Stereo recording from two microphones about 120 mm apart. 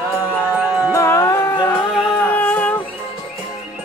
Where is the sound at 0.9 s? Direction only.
25° left (ahead or behind).